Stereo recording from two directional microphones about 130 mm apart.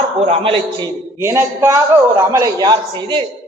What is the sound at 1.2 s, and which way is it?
A man's voice, 20° right (ahead or behind).